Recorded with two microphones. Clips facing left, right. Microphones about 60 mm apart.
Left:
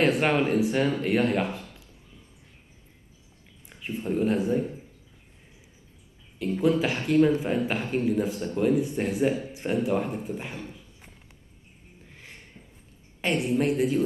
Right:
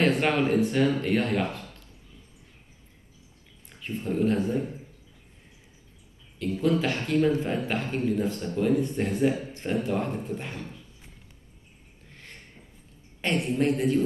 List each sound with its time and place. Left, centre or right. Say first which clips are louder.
0.0 s speech: left 1 dB; centre
3.6 s speech: left 1 dB; centre
6.4 s speech: left 1 dB; centre
12.1 s a sound: even; centre
13.2 s a man's voice: left 1 dB; centre